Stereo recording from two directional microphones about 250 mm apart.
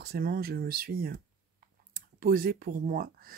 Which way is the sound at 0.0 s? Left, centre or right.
Right.